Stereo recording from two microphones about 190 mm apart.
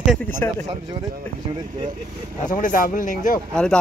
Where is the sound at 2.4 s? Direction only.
45° left (ahead or behind).